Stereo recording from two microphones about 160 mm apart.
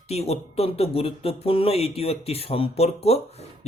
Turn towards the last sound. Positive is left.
turn(degrees=40)  # may be behind; listen again after turning